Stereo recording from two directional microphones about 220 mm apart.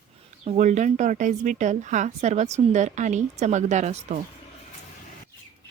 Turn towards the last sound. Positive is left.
turn(degrees=-30)  # may be behind; listen again after turning